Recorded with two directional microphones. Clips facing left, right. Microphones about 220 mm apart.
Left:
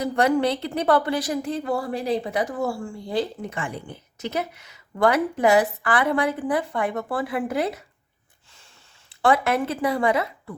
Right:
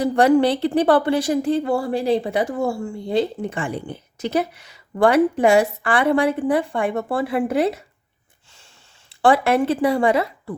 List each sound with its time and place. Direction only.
0.0 s a woman's voice: 30° right (ahead or behind)
9.2 s a woman's voice: 30° right (ahead or behind)